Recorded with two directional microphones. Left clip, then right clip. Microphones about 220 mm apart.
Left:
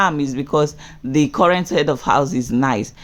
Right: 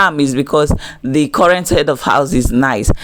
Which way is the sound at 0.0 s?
20° right (ahead or behind).